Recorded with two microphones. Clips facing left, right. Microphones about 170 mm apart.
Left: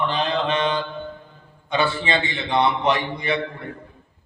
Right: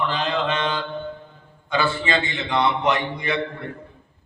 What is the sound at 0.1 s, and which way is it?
Mantra, 30° left (ahead or behind).